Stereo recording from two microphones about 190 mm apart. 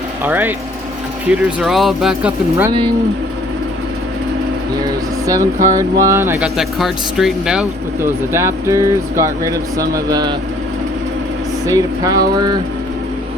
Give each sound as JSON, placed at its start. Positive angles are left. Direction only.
{"t": 0.3, "sound": "speech", "side_deg": -10}
{"t": 5.2, "sound": "speech", "side_deg": -15}
{"t": 6.6, "sound": "speech", "side_deg": 0}
{"t": 11.6, "sound": "speech", "side_deg": -15}